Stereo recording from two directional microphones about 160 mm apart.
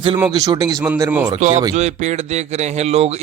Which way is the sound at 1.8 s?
45° right (ahead or behind).